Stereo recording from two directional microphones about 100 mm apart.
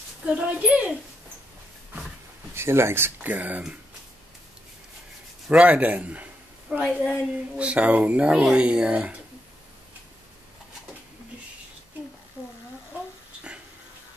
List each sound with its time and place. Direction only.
0.2 s speech: 15° right (ahead or behind)
2.5 s speech: 25° right (ahead or behind)
5.5 s speech: 10° right (ahead or behind)